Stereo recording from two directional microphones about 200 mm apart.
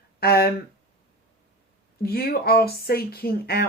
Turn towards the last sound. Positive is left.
turn(degrees=50)  # may be behind; listen again after turning